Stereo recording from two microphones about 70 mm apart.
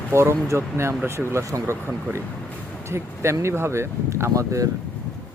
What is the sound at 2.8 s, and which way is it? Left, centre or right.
Speech, right.